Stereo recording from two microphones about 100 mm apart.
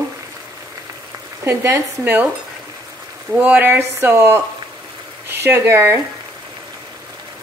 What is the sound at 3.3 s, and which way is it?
A woman's voice, 15° right (ahead or behind).